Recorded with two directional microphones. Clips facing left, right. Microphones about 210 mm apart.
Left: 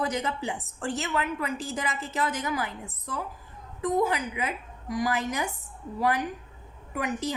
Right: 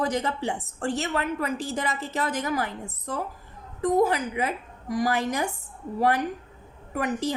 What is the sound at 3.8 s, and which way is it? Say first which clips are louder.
A woman's voice: right 4 dB; 40° right (ahead or behind).